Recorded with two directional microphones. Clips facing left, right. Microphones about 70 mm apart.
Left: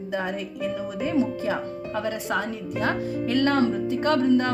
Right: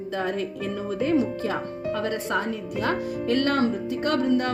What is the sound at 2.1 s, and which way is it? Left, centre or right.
Speech, right.